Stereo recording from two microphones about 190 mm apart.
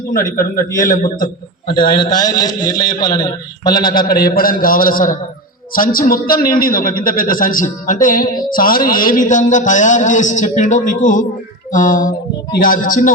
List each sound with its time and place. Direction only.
0.3 s a man's voice: 45° left (ahead or behind)
1.6 s a man's voice: 25° left (ahead or behind)
3.9 s a man's voice: 50° left (ahead or behind)